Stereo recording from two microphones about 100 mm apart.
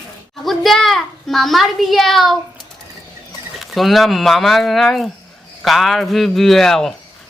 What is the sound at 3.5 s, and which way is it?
A child's voice, centre (ahead or behind).